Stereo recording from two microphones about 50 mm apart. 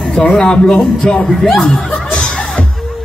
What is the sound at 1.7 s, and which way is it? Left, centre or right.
Chuckle, centre.